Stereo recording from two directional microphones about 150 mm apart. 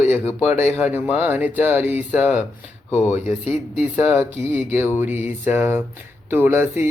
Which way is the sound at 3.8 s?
10° right (ahead or behind).